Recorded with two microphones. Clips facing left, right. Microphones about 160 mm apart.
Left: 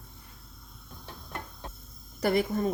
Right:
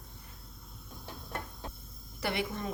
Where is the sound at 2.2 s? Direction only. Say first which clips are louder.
Left 8 dB; 40° left (ahead or behind).